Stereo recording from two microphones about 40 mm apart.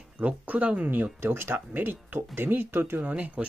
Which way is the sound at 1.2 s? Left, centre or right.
Right.